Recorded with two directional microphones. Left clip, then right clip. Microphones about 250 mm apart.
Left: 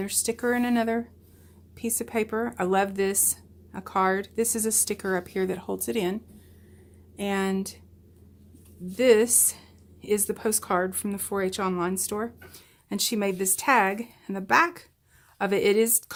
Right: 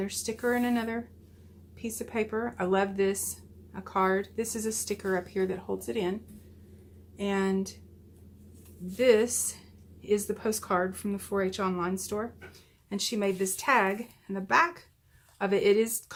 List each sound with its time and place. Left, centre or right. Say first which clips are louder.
0.0 s a woman's voice: left 3 dB; left
7.2 s a woman's voice: left 2 dB; left
9.0 s a woman's voice: left 3 dB; left